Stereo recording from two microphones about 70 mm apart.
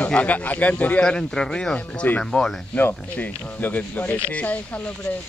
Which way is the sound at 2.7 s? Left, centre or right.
Left.